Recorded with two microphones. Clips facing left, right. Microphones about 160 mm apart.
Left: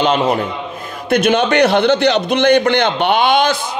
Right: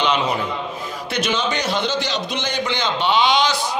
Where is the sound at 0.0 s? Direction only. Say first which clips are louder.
Left 5 dB; 50° left (ahead or behind).